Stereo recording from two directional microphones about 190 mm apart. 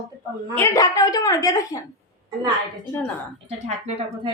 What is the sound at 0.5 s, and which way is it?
A woman's voice, 15° left (ahead or behind).